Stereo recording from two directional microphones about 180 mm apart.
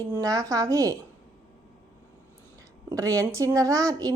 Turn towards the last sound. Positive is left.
turn(degrees=-20)  # may be behind; listen again after turning